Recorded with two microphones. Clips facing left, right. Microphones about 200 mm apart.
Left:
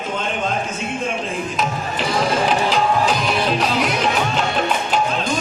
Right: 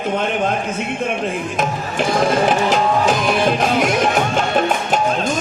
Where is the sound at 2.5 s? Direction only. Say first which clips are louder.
Right 2 dB; 50° right (ahead or behind).